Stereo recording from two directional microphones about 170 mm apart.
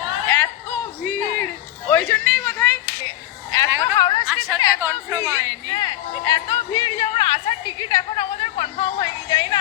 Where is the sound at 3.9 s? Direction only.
25° left (ahead or behind).